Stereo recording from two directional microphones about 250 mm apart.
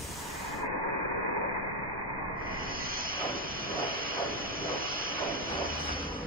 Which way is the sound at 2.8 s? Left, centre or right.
Right.